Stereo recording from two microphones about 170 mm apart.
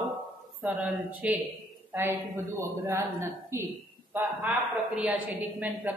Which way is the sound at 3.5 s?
15° right (ahead or behind).